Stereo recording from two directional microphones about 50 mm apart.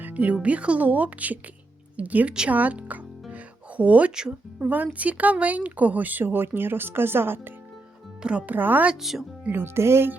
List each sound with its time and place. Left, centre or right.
0.0 s music: right
0.3 s speech: right
3.3 s music: right
4.1 s speech: centre
4.6 s speech: right
8.2 s speech: right
8.4 s speech: right
9.0 s speech: centre
9.5 s speech: right